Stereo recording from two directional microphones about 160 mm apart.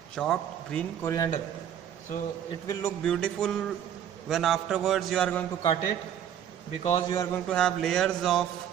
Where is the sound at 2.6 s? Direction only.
20° left (ahead or behind).